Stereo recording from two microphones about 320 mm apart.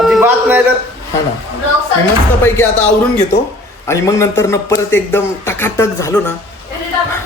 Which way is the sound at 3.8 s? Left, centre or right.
Centre.